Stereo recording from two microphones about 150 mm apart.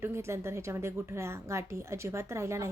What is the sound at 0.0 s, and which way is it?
A woman's voice, 15° right (ahead or behind).